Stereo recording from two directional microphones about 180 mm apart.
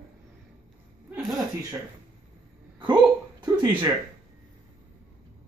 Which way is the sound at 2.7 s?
25° right (ahead or behind).